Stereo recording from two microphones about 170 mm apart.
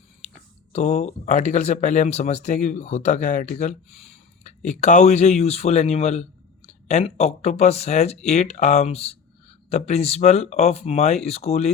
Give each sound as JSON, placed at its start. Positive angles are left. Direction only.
{"t": 0.7, "sound": "speech", "side_deg": 40}